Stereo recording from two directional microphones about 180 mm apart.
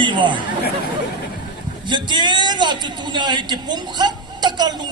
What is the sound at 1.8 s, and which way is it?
A man's voice, 25° right (ahead or behind).